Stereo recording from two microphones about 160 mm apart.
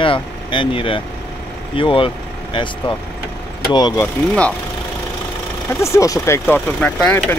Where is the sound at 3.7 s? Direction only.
25° left (ahead or behind).